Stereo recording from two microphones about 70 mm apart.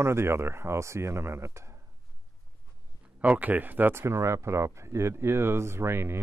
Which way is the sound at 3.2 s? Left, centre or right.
Right.